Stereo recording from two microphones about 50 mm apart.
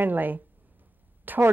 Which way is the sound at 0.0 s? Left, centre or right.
Right.